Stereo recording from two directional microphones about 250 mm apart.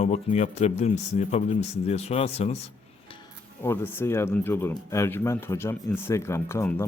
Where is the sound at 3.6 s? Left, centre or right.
Centre.